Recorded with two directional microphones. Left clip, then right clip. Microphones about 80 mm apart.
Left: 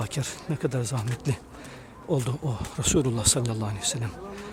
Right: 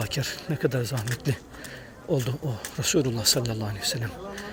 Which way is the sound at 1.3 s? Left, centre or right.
Left.